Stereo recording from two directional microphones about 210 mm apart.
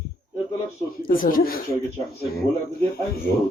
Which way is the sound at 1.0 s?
45° left (ahead or behind).